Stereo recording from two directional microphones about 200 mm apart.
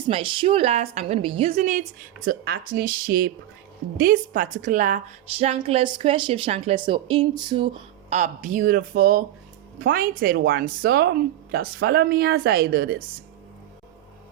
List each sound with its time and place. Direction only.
0.1 s a woman's voice: 25° right (ahead or behind); by 13.0 s 50° right (ahead or behind)